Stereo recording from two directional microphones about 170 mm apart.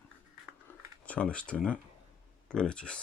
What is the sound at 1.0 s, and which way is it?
Speech, 10° left (ahead or behind).